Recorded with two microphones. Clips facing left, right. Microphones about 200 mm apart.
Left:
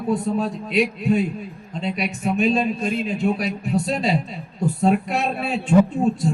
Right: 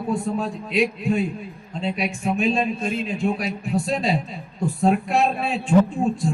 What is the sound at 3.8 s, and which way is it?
Speech, 5° left (ahead or behind).